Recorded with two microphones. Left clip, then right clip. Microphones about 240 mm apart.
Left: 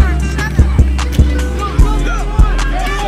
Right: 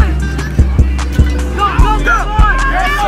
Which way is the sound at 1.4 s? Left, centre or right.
Centre.